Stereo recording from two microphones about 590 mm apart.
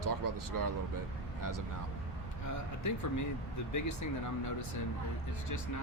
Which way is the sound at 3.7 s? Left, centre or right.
Left.